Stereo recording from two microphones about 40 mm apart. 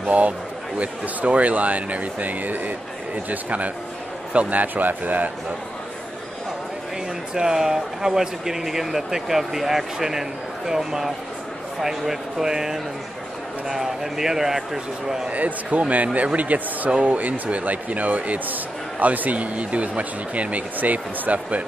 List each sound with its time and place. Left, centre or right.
0.0 s a man's voice: right
7.3 s speech: centre
15.2 s speech: right